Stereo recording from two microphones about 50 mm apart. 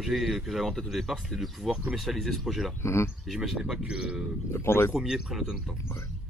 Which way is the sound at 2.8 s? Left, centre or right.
Left.